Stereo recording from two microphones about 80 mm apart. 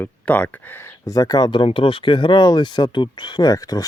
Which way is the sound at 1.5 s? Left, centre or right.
Left.